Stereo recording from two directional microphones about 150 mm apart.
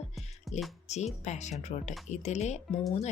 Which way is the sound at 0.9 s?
50° left (ahead or behind).